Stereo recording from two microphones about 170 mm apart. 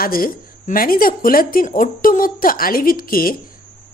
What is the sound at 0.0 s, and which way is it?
A woman's voice, 60° left (ahead or behind).